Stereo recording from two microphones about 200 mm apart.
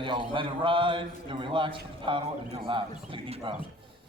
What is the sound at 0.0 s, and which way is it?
A man's voice, 25° right (ahead or behind).